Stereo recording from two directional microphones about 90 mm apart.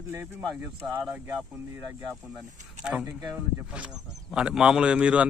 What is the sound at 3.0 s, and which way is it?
Speech, 25° right (ahead or behind).